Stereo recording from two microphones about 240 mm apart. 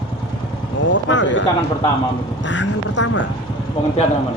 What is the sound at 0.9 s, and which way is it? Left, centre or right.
Speech, left.